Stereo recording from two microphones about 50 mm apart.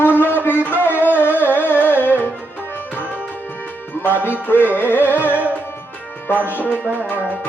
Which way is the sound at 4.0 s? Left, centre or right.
Left.